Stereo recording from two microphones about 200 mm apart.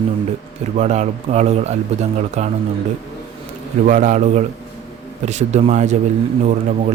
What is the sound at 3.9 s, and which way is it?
Speech, 40° right (ahead or behind).